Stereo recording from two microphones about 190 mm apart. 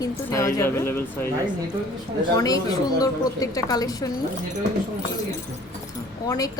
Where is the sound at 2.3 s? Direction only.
20° left (ahead or behind).